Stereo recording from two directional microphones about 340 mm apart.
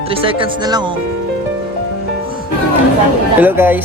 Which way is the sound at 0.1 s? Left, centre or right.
Centre.